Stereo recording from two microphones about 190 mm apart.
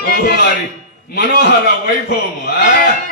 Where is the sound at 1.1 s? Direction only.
55° left (ahead or behind).